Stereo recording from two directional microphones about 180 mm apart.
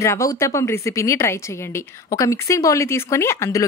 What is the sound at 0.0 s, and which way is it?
Speech, 15° left (ahead or behind).